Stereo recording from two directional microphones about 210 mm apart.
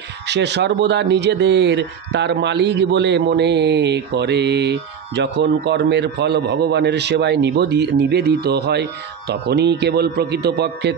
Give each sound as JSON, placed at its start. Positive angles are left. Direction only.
{"t": 0.3, "sound": "speech", "side_deg": -55}